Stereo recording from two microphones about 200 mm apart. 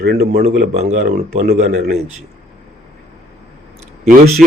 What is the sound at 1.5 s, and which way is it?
Speech, 50° right (ahead or behind).